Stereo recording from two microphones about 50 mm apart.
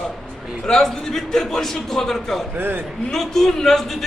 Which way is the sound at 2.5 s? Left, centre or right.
Right.